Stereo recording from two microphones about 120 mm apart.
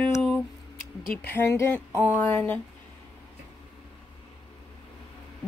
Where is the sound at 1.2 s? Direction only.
20° left (ahead or behind).